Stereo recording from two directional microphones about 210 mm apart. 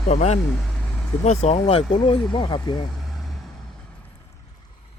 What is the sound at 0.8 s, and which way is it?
Vehicle, 5° left (ahead or behind).